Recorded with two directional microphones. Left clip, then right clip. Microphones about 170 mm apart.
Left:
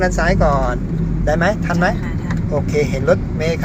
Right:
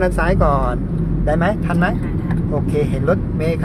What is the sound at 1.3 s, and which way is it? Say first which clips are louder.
Speech: left 2 dB; centre (ahead or behind).